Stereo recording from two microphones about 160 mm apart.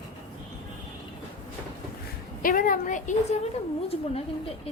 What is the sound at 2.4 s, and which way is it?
A woman's voice, 60° left (ahead or behind).